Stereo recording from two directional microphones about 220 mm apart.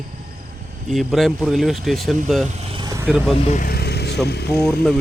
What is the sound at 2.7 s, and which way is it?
Vehicle, 15° right (ahead or behind).